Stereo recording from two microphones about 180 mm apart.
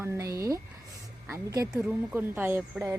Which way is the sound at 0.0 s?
15° right (ahead or behind).